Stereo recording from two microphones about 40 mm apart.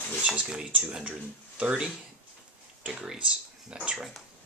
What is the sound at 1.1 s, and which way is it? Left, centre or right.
Speech, right.